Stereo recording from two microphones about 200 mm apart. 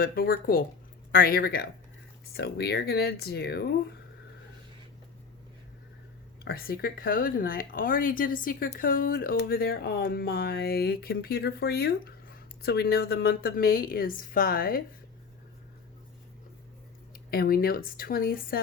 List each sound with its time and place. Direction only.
0.0 s speech: 50° left (ahead or behind)
6.4 s speech: 50° left (ahead or behind)
17.3 s speech: 50° left (ahead or behind)